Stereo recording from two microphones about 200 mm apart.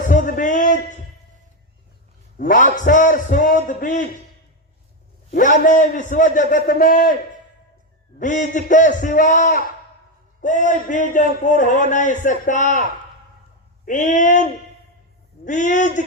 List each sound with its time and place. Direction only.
0.1 s speech: 40° left (ahead or behind)
2.4 s a man's voice: 40° left (ahead or behind)
5.3 s a man's voice: 40° left (ahead or behind)
8.2 s a man's voice: 40° left (ahead or behind)
13.8 s a man's voice: 40° left (ahead or behind)
15.4 s a man's voice: 40° left (ahead or behind)